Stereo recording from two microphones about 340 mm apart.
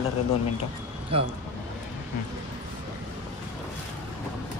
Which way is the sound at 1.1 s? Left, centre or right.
Centre.